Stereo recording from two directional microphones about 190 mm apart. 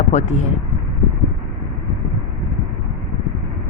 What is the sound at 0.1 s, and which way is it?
Speech, 35° left (ahead or behind).